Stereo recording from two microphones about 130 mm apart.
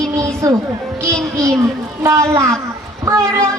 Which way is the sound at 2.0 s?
25° right (ahead or behind).